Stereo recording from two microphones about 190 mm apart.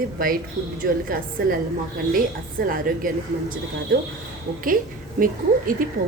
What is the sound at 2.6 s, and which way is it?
Speech, 45° right (ahead or behind).